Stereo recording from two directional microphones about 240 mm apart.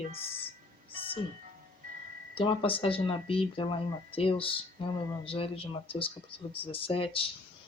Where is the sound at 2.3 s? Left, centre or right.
Left.